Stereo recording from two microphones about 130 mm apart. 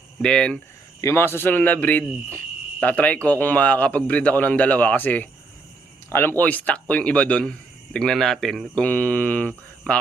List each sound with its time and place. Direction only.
0.2 s a man's voice: 5° left (ahead or behind)
1.0 s a man's voice: 20° left (ahead or behind)